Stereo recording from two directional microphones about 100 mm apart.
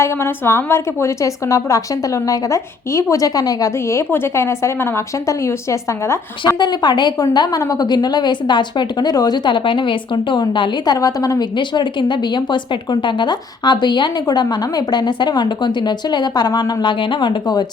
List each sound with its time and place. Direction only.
0.0 s a woman's voice: 25° left (ahead or behind)
6.6 s speech: 45° left (ahead or behind)
10.9 s a woman's voice: 35° left (ahead or behind)
11.5 s speech: 50° left (ahead or behind)